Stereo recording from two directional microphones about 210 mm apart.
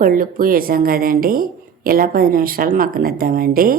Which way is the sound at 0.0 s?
40° right (ahead or behind).